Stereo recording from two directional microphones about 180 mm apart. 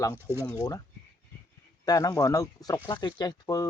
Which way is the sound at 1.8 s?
20° left (ahead or behind).